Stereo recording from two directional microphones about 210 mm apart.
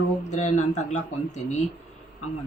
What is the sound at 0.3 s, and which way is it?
Speech, 35° left (ahead or behind).